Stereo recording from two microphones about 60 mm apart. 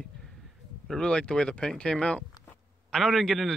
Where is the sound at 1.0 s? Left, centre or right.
Centre.